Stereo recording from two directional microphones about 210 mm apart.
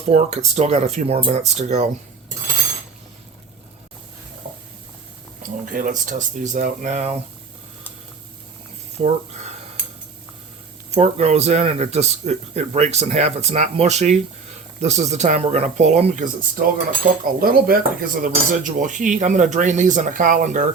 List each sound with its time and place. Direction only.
0.1 s speech: 30° right (ahead or behind)
5.4 s speech: 40° right (ahead or behind)
9.0 s a sound: 30° right (ahead or behind)
10.9 s speech: 30° right (ahead or behind)